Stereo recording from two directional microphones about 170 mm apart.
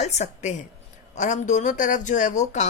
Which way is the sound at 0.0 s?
40° left (ahead or behind).